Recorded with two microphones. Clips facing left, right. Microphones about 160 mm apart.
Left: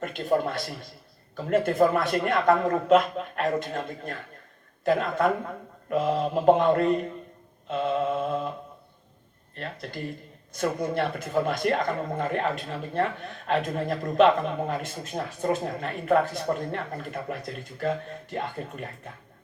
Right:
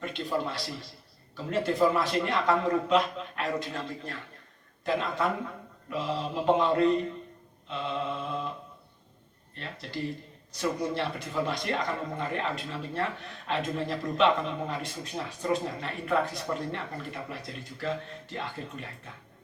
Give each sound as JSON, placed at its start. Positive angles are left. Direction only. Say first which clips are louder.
{"t": 0.0, "sound": "a man's voice", "louder": "left 6 dB", "side_deg": 50}
{"t": 9.6, "sound": "a man's voice", "louder": "left 1 dB", "side_deg": 50}